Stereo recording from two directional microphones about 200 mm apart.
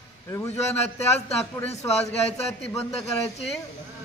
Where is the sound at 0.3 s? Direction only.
15° left (ahead or behind).